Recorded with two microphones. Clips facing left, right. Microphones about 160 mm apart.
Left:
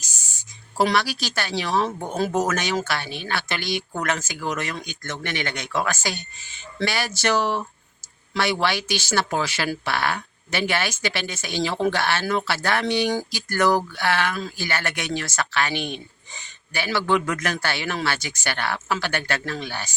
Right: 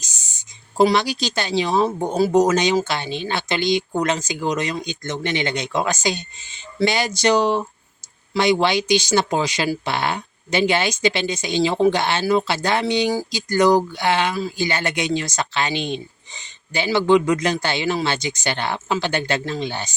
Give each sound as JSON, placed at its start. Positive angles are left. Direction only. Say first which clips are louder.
{"t": 0.0, "sound": "speech", "louder": "right 1 dB", "side_deg": -20}